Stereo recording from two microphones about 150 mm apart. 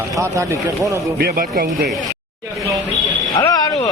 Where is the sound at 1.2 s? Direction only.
75° right (ahead or behind).